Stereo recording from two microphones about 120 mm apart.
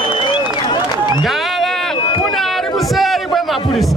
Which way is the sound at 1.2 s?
Centre (ahead or behind).